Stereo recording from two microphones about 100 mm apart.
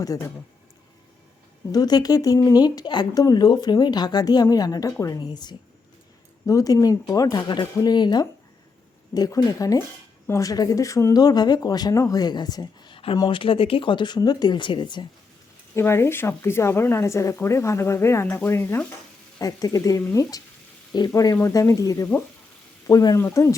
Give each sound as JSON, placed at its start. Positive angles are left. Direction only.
{"t": 0.0, "sound": "speech", "side_deg": 35}
{"t": 1.7, "sound": "speech", "side_deg": 40}
{"t": 6.4, "sound": "speech", "side_deg": 35}
{"t": 13.3, "sound": "speech", "side_deg": 60}
{"t": 15.7, "sound": "a woman's voice", "side_deg": 25}
{"t": 19.4, "sound": "speech", "side_deg": 40}
{"t": 21.1, "sound": "speech", "side_deg": 35}